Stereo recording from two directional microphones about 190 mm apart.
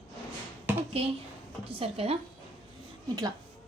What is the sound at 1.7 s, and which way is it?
Speech, 30° right (ahead or behind).